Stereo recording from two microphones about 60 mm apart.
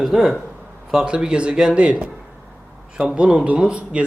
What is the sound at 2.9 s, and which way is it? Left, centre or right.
Speech, centre.